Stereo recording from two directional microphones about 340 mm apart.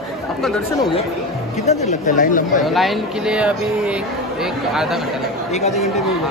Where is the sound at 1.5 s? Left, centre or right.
Centre.